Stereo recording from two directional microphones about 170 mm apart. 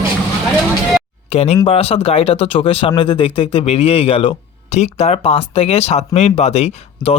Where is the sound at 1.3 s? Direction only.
40° left (ahead or behind).